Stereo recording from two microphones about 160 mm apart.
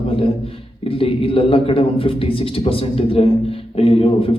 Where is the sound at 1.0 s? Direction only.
35° left (ahead or behind).